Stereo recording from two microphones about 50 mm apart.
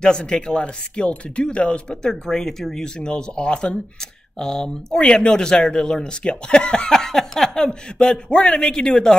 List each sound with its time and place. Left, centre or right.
0.0 s speech: centre